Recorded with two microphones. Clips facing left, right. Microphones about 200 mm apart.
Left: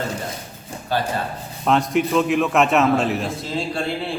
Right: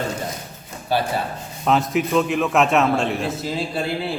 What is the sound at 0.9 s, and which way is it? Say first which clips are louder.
A man's voice: right 1 dB; 10° right (ahead or behind).